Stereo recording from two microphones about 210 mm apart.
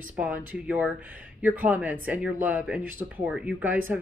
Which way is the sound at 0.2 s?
5° right (ahead or behind).